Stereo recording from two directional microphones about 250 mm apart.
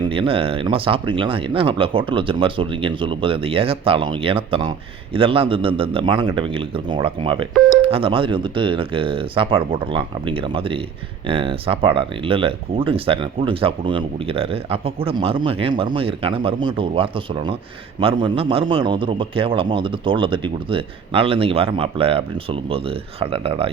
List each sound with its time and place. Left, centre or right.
0.0 s speech: right